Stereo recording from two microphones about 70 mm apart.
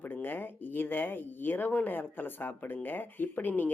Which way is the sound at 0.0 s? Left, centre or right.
Left.